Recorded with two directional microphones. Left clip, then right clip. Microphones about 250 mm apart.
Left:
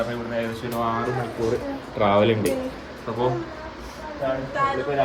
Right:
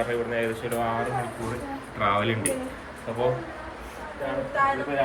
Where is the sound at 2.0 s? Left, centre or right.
Centre.